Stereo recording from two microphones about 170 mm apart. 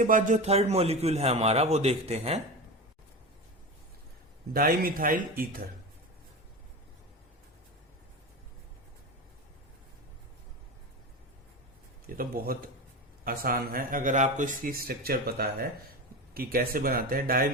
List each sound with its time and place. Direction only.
0.0 s a man's voice: 50° right (ahead or behind)
4.5 s speech: 60° right (ahead or behind)
12.0 s speech: 60° right (ahead or behind)